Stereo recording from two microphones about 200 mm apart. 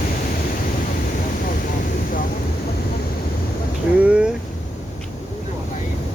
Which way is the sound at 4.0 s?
5° right (ahead or behind).